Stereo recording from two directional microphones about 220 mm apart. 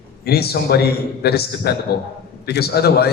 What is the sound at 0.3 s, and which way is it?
A man's voice, 45° left (ahead or behind).